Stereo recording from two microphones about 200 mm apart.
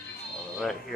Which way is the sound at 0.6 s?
Centre (ahead or behind).